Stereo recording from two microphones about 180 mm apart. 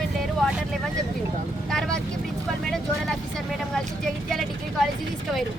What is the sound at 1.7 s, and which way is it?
Speech, centre (ahead or behind).